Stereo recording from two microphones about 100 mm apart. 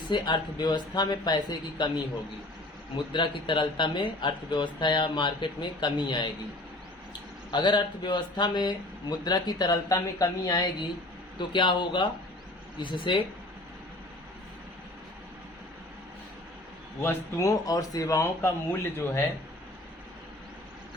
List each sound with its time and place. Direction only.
0.1 s speech: 45° left (ahead or behind)
2.9 s speech: 55° left (ahead or behind)
7.5 s speech: 50° left (ahead or behind)
17.0 s speech: 30° left (ahead or behind)